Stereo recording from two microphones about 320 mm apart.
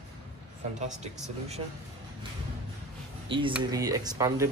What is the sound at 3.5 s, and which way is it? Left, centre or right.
Speech, centre.